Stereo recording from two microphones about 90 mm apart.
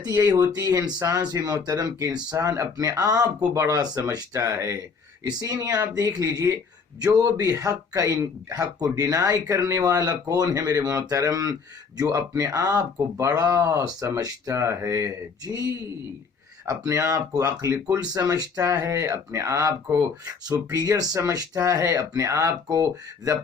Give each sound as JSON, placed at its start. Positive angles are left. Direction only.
{"t": 0.0, "sound": "speech", "side_deg": -40}
{"t": 16.6, "sound": "speech", "side_deg": -35}